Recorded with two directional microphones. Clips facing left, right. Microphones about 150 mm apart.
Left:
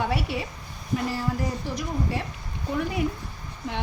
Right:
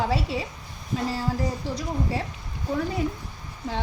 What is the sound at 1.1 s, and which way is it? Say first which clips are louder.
Speech: right 1 dB; 30° right (ahead or behind).